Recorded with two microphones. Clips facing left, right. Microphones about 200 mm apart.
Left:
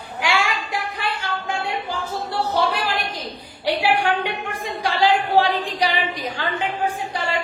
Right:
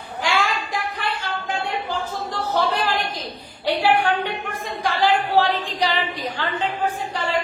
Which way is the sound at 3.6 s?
10° left (ahead or behind).